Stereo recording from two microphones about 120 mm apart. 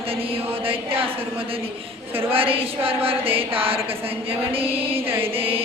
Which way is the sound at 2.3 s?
50° right (ahead or behind).